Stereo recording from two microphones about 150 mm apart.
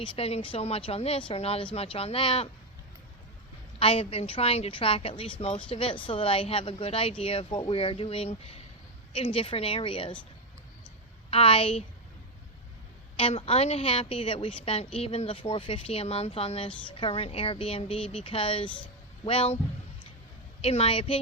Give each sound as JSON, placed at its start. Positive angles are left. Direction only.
{"t": 0.0, "sound": "a woman's voice", "side_deg": 40}
{"t": 3.8, "sound": "a woman's voice", "side_deg": 40}
{"t": 11.3, "sound": "a woman's voice", "side_deg": 40}
{"t": 13.1, "sound": "a woman's voice", "side_deg": 40}
{"t": 20.6, "sound": "a woman's voice", "side_deg": 40}